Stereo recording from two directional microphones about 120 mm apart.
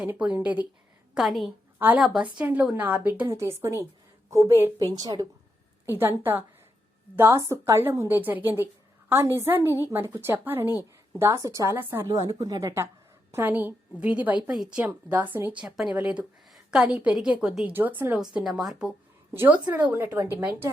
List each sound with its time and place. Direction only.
0.0 s a woman's voice: 10° right (ahead or behind)
1.1 s a woman's voice: centre (ahead or behind); by 5.3 s 30° right (ahead or behind)
5.8 s a woman's voice: 15° right (ahead or behind)
15.6 s a woman's voice: 5° right (ahead or behind)
18.2 s speech: 5° right (ahead or behind)
19.3 s a woman's voice: 15° right (ahead or behind)